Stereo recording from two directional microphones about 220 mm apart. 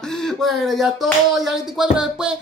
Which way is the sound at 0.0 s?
Centre (ahead or behind).